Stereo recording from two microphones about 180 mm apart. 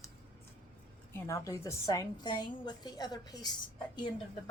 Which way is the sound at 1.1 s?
15° left (ahead or behind).